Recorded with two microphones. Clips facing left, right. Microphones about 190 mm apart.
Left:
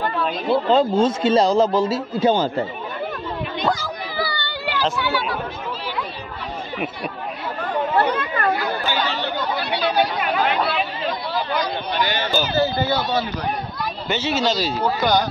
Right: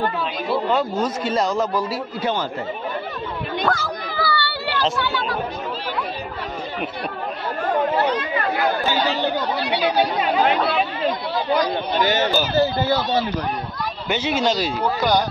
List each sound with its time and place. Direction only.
0.5 s a man's voice: 30° left (ahead or behind)
3.6 s a sound: 15° left (ahead or behind)
8.1 s chatter: 55° left (ahead or behind)
9.7 s chatter: 15° right (ahead or behind)
14.0 s speech: 10° right (ahead or behind)